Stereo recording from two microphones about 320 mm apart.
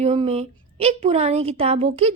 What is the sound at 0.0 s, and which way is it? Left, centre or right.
Speech, centre.